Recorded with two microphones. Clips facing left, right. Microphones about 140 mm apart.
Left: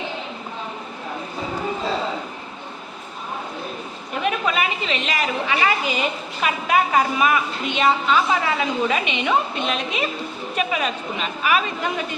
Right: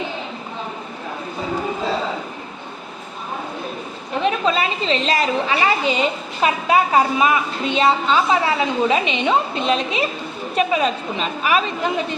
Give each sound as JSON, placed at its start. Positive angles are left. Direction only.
{"t": 4.2, "sound": "a woman's voice", "side_deg": -30}